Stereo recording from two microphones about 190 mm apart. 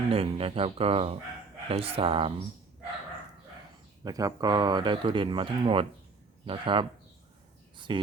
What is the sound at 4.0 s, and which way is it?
Speech, 20° right (ahead or behind).